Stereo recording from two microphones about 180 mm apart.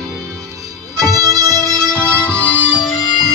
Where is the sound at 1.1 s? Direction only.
20° right (ahead or behind).